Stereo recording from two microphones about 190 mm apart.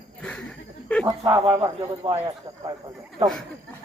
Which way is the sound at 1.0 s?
20° right (ahead or behind).